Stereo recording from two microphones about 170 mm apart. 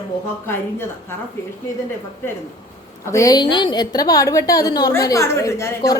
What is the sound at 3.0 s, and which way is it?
A woman's voice, 20° left (ahead or behind).